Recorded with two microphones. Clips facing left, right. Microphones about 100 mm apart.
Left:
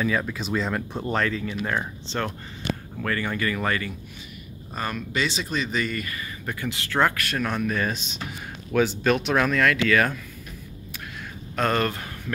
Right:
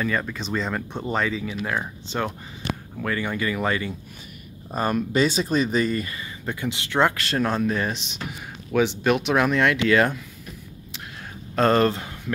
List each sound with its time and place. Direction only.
0.0 s speech: centre (ahead or behind); by 3.9 s 15° right (ahead or behind)
4.7 s speech: 35° right (ahead or behind)
7.7 s speech: 15° right (ahead or behind)
9.0 s speech: 10° right (ahead or behind)
11.5 s speech: 30° right (ahead or behind)